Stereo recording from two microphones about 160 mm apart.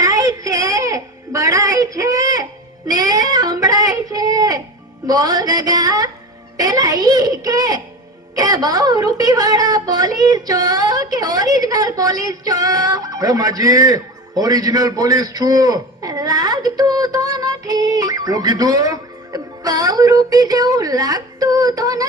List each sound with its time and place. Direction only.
0.0 s baby cry: 20° right (ahead or behind)
5.0 s a woman's voice: 25° right (ahead or behind)